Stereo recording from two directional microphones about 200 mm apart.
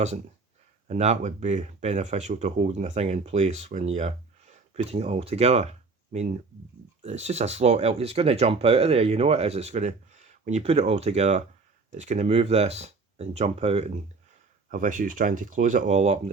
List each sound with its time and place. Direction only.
0.9 s speech: 35° right (ahead or behind)